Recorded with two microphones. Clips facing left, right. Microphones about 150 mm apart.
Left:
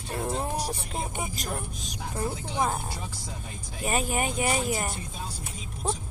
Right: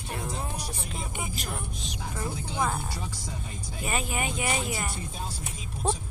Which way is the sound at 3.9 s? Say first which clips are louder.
Left 3 dB; 40° left (ahead or behind).